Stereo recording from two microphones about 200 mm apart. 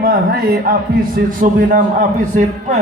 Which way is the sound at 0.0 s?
50° right (ahead or behind).